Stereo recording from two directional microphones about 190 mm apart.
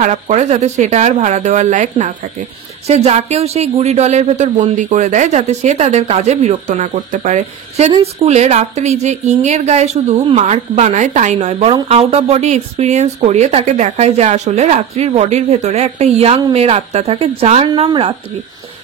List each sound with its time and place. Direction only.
0.0 s speech: 40° right (ahead or behind)